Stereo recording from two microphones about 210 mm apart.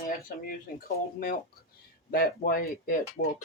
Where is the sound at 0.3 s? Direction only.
45° left (ahead or behind).